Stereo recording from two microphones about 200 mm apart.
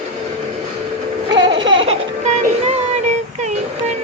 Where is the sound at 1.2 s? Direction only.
20° right (ahead or behind).